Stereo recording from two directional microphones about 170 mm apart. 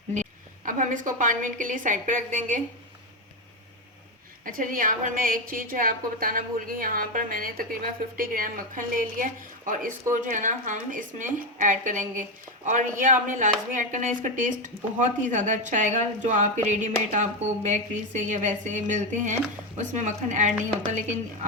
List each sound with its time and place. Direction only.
0.1 s speech: 45° right (ahead or behind)
4.4 s speech: 55° right (ahead or behind)